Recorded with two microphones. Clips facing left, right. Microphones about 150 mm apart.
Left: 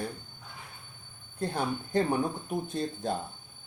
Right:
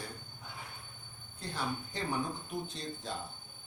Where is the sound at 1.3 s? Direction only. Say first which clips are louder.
Left 7 dB; 50° left (ahead or behind).